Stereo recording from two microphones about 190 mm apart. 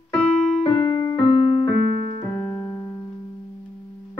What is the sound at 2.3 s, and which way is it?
Keyboard, 15° left (ahead or behind).